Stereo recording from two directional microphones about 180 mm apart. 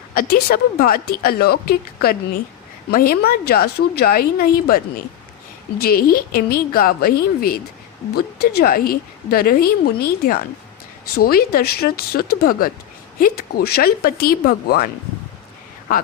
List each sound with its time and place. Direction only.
0.1 s a woman's voice: 55° left (ahead or behind)